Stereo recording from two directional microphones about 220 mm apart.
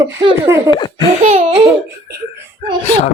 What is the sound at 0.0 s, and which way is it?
Speech, 25° right (ahead or behind).